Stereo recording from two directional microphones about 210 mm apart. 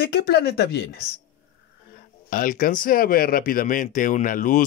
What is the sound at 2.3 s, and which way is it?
Speech, 40° left (ahead or behind).